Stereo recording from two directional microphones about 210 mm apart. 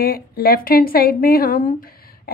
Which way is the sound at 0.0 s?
45° left (ahead or behind).